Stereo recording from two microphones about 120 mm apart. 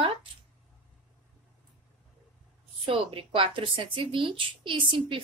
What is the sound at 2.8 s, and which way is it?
Speech, 45° right (ahead or behind).